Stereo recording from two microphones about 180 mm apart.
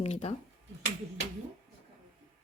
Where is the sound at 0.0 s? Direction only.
35° left (ahead or behind).